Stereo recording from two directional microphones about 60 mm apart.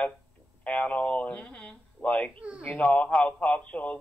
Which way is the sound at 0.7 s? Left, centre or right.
Left.